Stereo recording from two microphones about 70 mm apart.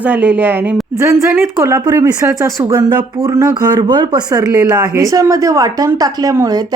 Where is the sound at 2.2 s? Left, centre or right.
Right.